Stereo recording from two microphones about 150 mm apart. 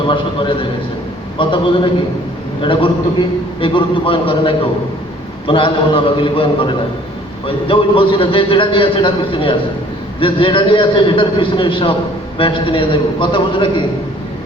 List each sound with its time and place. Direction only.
0.1 s a man's voice: 35° left (ahead or behind)